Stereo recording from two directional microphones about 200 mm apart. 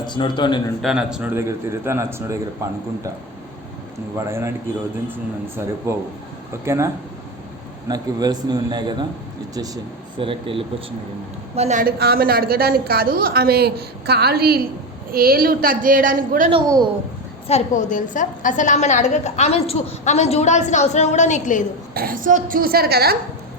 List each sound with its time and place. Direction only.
0.0 s a man's voice: 25° left (ahead or behind)
0.8 s a man's voice: 5° right (ahead or behind)
4.2 s a man's voice: 15° right (ahead or behind)
5.6 s a man's voice: 10° right (ahead or behind)
10.2 s a man's voice: 25° right (ahead or behind); by 16.5 s 45° right (ahead or behind)
16.5 s a man's voice: 20° right (ahead or behind)
17.5 s a woman's voice: 40° left (ahead or behind)
21.9 s a woman's voice: 45° right (ahead or behind)